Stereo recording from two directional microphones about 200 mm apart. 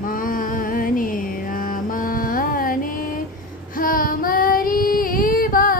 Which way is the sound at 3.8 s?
45° left (ahead or behind).